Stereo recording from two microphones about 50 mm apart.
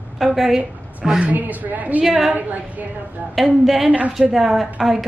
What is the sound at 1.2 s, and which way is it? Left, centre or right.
Speech, right.